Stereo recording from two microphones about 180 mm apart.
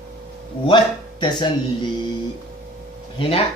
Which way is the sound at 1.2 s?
25° left (ahead or behind).